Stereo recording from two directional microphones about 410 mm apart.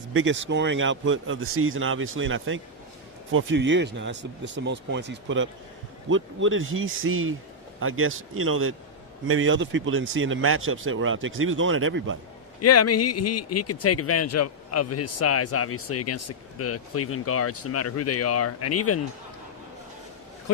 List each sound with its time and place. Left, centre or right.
0.1 s speech: right
12.5 s a man's voice: left